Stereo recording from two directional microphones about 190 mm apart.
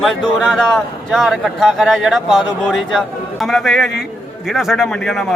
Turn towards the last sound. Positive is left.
turn(degrees=0)  # may be behind; listen again after turning